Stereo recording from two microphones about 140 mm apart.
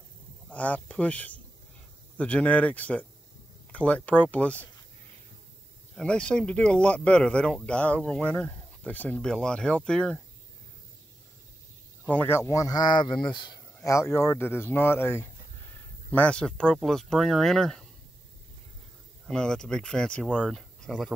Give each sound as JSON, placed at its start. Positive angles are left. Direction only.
{"t": 0.5, "sound": "speech", "side_deg": 10}
{"t": 5.9, "sound": "speech", "side_deg": 5}
{"t": 12.1, "sound": "speech", "side_deg": 15}
{"t": 13.7, "sound": "speech", "side_deg": 20}
{"t": 19.2, "sound": "speech", "side_deg": 5}